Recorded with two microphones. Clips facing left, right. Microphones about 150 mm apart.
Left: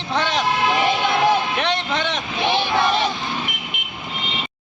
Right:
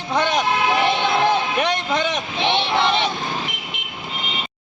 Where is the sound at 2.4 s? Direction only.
25° right (ahead or behind).